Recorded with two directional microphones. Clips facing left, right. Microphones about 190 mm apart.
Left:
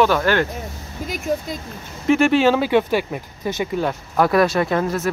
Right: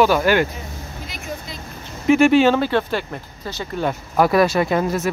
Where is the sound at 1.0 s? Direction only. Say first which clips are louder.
Left 10 dB; 45° left (ahead or behind).